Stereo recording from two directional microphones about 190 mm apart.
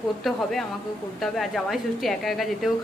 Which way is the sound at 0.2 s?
Centre (ahead or behind).